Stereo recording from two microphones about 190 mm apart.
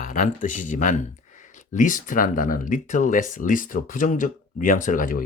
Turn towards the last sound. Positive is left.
turn(degrees=45)  # may be behind; listen again after turning